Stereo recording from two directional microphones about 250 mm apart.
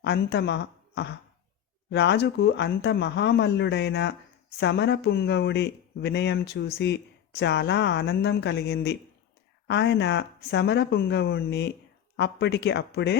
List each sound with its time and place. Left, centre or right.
0.0 s a woman's voice: left